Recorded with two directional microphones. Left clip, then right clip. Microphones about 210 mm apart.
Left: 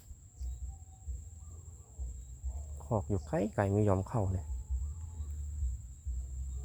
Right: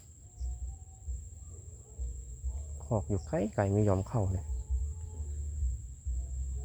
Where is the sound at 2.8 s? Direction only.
5° right (ahead or behind).